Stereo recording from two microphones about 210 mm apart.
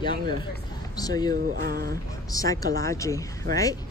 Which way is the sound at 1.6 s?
45° right (ahead or behind).